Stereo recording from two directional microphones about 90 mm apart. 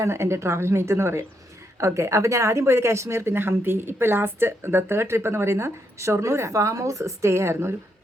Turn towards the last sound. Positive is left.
turn(degrees=-30)  # may be behind; listen again after turning